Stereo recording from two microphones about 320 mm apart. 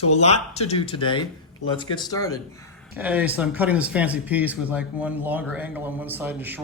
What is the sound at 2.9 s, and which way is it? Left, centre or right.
Speech, centre.